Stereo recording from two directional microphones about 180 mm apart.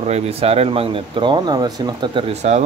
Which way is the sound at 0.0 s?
35° right (ahead or behind).